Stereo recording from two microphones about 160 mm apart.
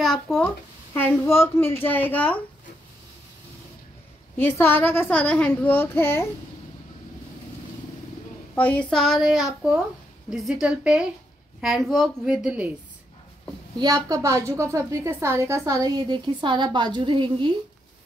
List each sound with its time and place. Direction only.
0.0 s speech: centre (ahead or behind)
0.9 s a child's voice: 15° left (ahead or behind)
4.4 s a child's voice: 15° left (ahead or behind)
8.5 s a woman's voice: 10° left (ahead or behind)
13.7 s a woman's voice: 25° right (ahead or behind)